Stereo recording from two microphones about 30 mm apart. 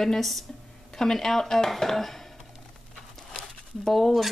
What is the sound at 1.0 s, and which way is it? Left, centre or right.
Speech, centre.